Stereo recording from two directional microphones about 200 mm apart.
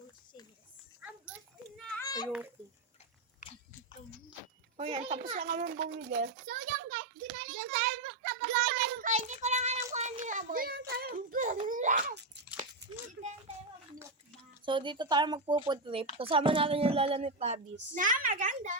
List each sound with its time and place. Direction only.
1.0 s children playing: 5° right (ahead or behind)
1.9 s children playing: 15° left (ahead or behind)
3.4 s biting: 40° left (ahead or behind)
4.8 s a child's voice: 30° right (ahead or behind)
7.8 s child singing: 40° right (ahead or behind)
9.9 s a sound: 35° right (ahead or behind)
14.6 s a woman's voice: 25° right (ahead or behind)